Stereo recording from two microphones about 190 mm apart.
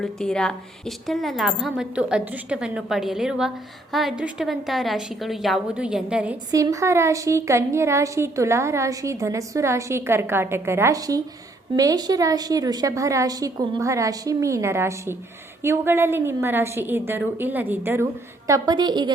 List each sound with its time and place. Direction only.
0.0 s a woman's voice: 5° left (ahead or behind)
6.5 s a woman's voice: 15° right (ahead or behind)